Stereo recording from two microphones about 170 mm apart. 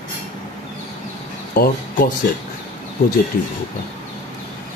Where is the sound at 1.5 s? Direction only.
60° left (ahead or behind).